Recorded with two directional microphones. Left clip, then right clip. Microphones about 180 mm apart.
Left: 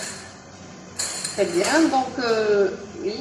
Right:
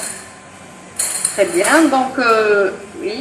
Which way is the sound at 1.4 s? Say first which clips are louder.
Right 7 dB; 15° right (ahead or behind).